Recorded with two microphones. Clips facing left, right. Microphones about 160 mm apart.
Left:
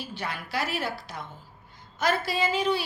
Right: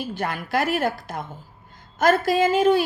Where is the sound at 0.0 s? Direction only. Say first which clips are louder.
Right 7 dB; 50° right (ahead or behind).